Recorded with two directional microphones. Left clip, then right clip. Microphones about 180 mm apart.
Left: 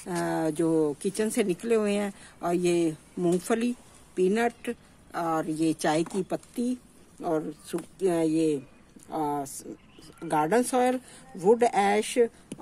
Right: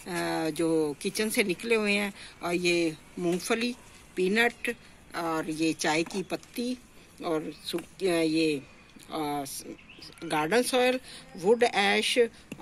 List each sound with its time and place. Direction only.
0.0 s a woman's voice: 45° left (ahead or behind)